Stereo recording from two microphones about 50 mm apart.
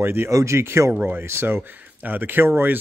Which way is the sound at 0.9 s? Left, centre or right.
Right.